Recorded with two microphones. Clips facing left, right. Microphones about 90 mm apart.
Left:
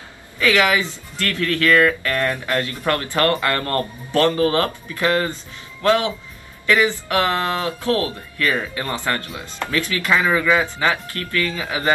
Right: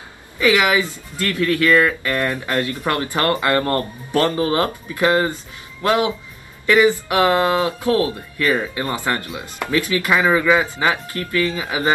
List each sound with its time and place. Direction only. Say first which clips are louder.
0.4 s speech: right 1 dB; 20° right (ahead or behind)